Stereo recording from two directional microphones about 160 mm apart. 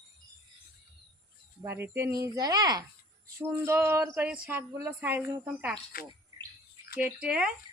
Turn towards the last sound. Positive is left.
turn(degrees=-5)  # may be behind; listen again after turning